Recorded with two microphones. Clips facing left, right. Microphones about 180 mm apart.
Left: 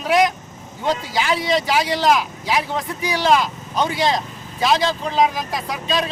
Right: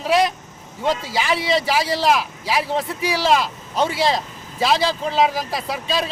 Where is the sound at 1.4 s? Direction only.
Centre (ahead or behind).